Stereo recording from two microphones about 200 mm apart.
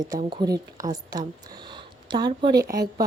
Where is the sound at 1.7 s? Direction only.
20° right (ahead or behind).